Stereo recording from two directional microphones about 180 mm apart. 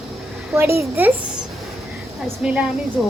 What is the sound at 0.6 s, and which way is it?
Speech, 15° right (ahead or behind).